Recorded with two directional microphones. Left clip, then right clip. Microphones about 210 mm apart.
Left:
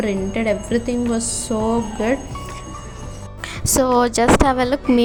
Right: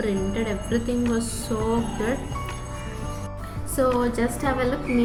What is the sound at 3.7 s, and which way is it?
A woman's voice, 45° left (ahead or behind).